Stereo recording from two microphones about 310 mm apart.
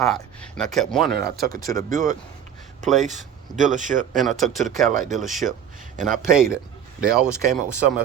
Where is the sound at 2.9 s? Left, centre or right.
Right.